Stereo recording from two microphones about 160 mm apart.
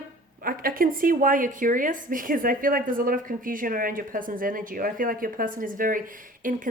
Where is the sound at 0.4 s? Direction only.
65° right (ahead or behind).